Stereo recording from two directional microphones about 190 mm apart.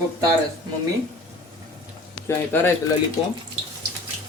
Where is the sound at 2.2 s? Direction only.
10° left (ahead or behind).